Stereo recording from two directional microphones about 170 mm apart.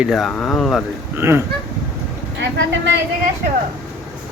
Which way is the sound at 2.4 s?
90° right.